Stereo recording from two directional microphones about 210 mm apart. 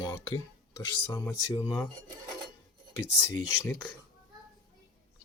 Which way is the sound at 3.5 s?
15° left (ahead or behind).